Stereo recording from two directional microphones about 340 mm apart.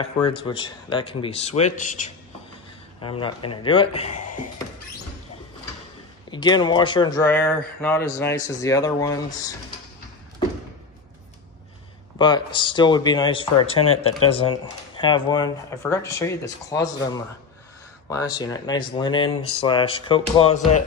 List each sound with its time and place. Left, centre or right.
0.0 s speech: centre
6.3 s speech: centre
12.2 s speech: centre